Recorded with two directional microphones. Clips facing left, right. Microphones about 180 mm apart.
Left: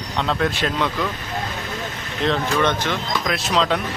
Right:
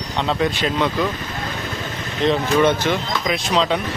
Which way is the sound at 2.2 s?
10° right (ahead or behind).